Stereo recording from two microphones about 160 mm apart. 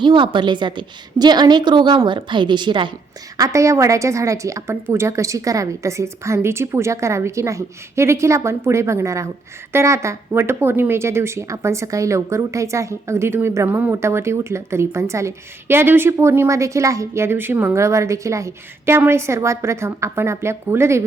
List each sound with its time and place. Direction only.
0.0 s a woman's voice: 30° right (ahead or behind)